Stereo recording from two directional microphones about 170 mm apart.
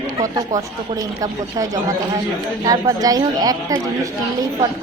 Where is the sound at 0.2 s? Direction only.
20° right (ahead or behind).